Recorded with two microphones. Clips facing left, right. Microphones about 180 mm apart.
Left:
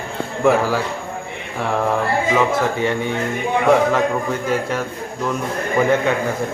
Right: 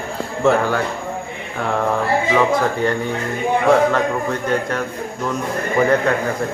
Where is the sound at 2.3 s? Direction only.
5° left (ahead or behind).